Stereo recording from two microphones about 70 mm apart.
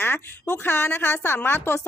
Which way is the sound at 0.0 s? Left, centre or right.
Left.